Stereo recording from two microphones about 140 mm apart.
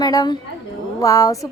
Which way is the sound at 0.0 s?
30° left (ahead or behind).